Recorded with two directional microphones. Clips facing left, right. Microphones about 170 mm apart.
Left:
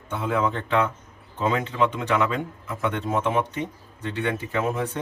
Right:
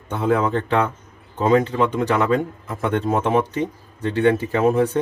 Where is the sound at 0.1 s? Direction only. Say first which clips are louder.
Right 5 dB; 40° right (ahead or behind).